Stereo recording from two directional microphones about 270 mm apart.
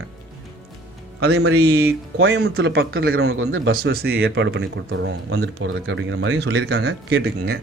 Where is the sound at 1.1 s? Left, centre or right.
Right.